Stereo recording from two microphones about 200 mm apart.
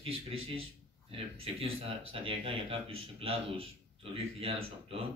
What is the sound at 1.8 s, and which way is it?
Speech, 25° right (ahead or behind).